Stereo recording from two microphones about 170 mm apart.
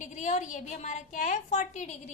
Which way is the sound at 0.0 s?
45° left (ahead or behind).